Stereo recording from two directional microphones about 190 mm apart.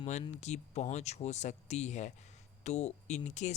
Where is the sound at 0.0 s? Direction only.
35° left (ahead or behind).